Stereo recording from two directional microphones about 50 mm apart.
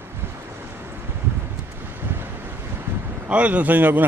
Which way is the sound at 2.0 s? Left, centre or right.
Right.